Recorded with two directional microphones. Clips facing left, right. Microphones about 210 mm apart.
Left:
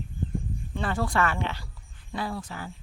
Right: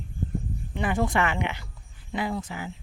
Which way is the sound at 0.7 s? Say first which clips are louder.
Right 3 dB; 15° right (ahead or behind).